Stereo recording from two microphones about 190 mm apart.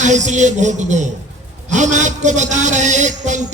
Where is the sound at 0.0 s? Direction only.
40° right (ahead or behind).